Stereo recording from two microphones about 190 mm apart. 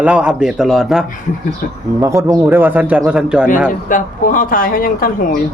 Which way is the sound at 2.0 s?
15° right (ahead or behind).